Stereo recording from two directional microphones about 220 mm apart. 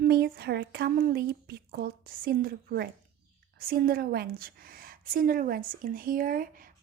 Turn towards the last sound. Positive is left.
turn(degrees=-40)  # may be behind; listen again after turning